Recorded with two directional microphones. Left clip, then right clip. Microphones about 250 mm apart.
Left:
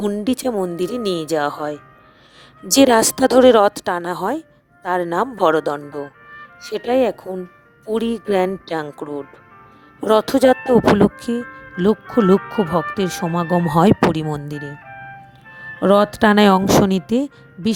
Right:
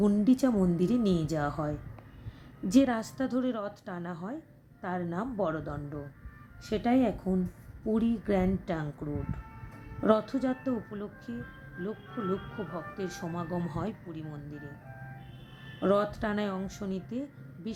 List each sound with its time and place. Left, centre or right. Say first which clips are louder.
0.0 s speech: left 6 dB; left
10.1 s speech: left 14 dB; left
15.8 s speech: left 14 dB; left